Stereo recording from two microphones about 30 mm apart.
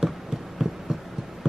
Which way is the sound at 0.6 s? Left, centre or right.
Centre.